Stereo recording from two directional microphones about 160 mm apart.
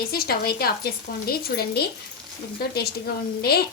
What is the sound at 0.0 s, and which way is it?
A woman's voice, 70° left (ahead or behind).